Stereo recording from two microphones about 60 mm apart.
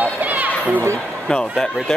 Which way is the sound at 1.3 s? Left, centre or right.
Centre.